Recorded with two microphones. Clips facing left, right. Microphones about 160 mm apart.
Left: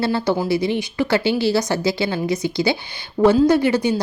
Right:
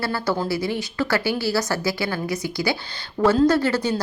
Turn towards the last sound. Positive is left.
turn(degrees=15)  # may be behind; listen again after turning